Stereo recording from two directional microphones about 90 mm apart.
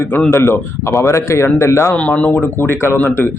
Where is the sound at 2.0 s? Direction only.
15° left (ahead or behind).